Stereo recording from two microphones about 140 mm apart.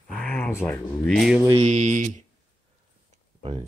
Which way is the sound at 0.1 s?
10° left (ahead or behind).